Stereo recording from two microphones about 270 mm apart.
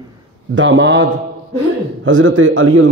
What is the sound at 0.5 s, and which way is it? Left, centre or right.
A man's voice, right.